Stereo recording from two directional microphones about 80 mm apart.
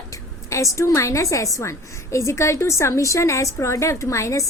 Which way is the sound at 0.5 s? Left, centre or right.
Left.